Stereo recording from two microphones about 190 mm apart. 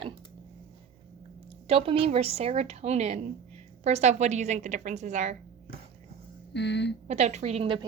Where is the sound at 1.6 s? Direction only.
30° right (ahead or behind).